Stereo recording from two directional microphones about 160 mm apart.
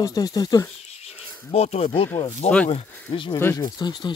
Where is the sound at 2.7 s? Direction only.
35° left (ahead or behind).